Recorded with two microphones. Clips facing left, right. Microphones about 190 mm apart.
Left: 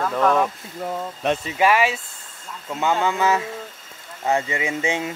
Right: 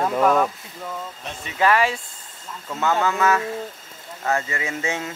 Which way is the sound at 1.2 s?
60° left (ahead or behind).